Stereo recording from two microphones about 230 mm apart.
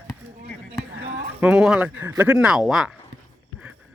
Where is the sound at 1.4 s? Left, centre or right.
Centre.